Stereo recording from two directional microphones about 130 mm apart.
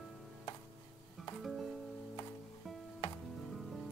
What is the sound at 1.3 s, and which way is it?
Music, centre (ahead or behind).